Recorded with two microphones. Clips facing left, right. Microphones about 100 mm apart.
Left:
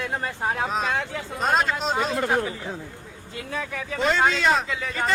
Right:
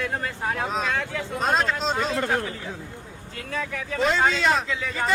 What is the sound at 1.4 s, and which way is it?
Speech, centre (ahead or behind).